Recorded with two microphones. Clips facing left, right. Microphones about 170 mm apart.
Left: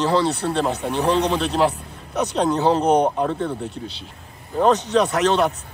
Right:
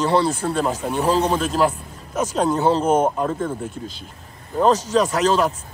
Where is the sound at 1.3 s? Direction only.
40° right (ahead or behind).